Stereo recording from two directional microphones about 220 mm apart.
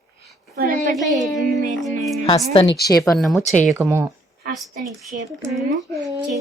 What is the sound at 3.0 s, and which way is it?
Speech, centre (ahead or behind).